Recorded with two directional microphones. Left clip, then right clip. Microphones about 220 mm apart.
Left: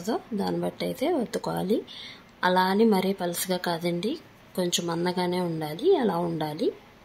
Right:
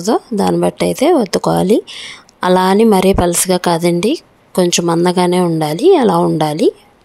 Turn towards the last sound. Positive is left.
turn(degrees=-45)  # may be behind; listen again after turning